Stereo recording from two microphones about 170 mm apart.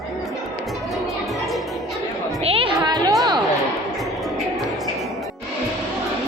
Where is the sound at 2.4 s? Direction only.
35° right (ahead or behind).